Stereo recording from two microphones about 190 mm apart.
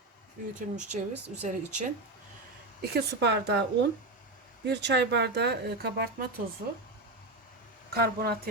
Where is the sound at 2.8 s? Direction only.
60° right (ahead or behind).